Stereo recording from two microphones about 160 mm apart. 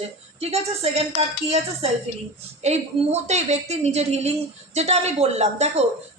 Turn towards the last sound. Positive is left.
turn(degrees=-40)  # may be behind; listen again after turning